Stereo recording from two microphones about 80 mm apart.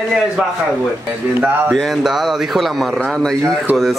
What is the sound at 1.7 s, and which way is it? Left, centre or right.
Speech, centre.